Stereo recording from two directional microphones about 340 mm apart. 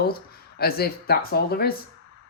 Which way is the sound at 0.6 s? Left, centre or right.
Left.